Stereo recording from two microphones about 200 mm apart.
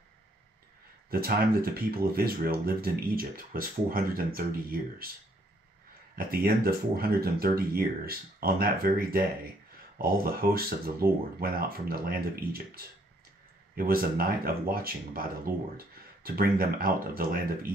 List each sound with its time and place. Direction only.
1.1 s speech: 50° right (ahead or behind)
6.1 s speech: 45° right (ahead or behind)